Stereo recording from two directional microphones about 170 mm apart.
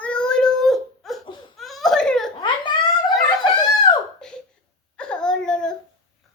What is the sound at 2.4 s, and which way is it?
Babbling, 25° left (ahead or behind).